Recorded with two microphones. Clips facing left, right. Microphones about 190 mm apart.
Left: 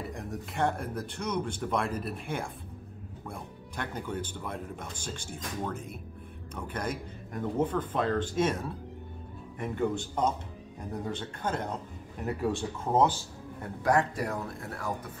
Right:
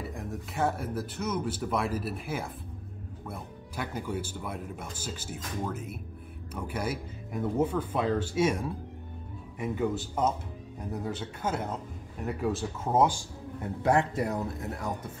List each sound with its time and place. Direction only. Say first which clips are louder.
0.1 s speech: even; centre (ahead or behind)
13.8 s speech: right 1 dB; 25° right (ahead or behind)